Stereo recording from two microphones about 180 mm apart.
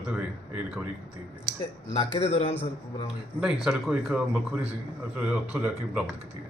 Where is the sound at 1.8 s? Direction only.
35° left (ahead or behind).